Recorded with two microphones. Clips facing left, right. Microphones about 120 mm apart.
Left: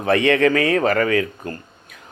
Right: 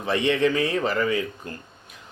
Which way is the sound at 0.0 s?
60° left (ahead or behind).